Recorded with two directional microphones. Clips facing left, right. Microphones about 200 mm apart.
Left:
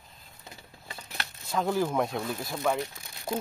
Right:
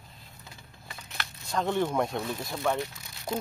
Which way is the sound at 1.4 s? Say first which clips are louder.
Even; 5° left (ahead or behind).